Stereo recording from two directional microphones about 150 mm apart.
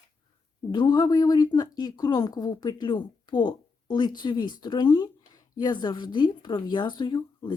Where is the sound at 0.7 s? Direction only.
30° left (ahead or behind).